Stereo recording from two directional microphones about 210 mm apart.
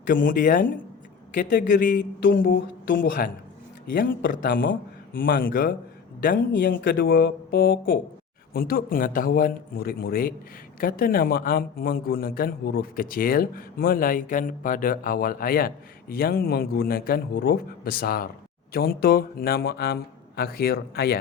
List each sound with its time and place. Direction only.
0.0 s a man's voice: 40° left (ahead or behind)